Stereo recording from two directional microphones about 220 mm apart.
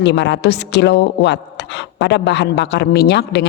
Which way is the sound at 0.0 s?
50° left (ahead or behind).